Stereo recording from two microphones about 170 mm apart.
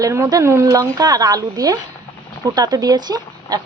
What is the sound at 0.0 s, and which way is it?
Speech, 20° right (ahead or behind).